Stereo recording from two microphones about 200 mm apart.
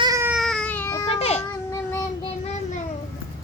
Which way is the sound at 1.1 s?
30° left (ahead or behind).